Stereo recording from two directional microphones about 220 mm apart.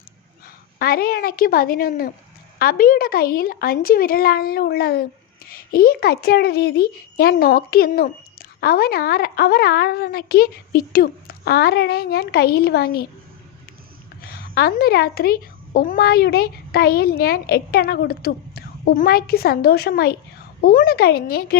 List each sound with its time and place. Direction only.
0.4 s a woman's voice: 45° left (ahead or behind)
14.2 s a child's voice: 45° left (ahead or behind)